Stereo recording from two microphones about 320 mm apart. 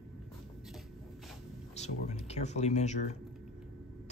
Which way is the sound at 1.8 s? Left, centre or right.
Centre.